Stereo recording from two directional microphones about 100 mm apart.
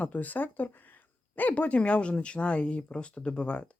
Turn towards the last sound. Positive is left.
turn(degrees=10)  # may be behind; listen again after turning